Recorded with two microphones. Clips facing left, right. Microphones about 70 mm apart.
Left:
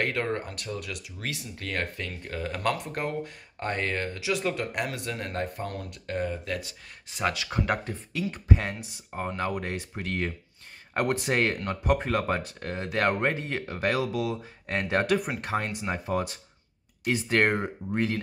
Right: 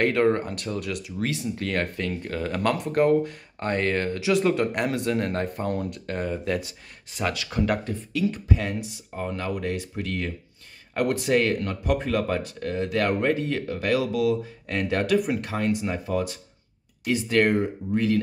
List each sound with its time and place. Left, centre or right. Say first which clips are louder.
0.0 s speech: right 7 dB; centre
7.1 s speech: right 1 dB; centre; by 18.2 s left